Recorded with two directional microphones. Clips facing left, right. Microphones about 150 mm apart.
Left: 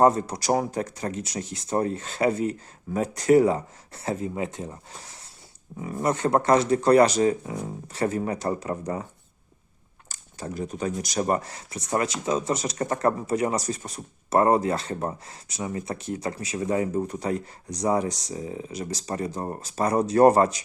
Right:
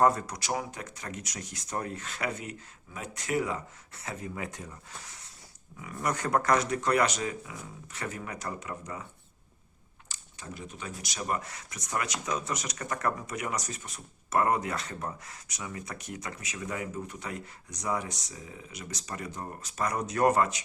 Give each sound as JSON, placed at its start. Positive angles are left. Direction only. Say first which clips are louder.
{"t": 0.0, "sound": "speech", "louder": "left 5 dB", "side_deg": 25}
{"t": 5.8, "sound": "speech", "louder": "left 7 dB", "side_deg": 30}
{"t": 10.1, "sound": "speech", "louder": "left 9 dB", "side_deg": 40}